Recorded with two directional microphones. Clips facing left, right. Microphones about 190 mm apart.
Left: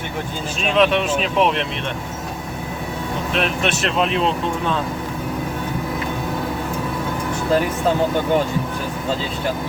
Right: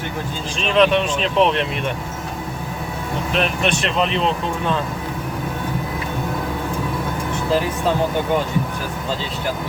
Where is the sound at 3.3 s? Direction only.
Centre (ahead or behind).